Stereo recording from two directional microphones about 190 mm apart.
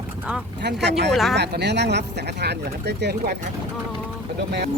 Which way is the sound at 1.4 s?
60° right (ahead or behind).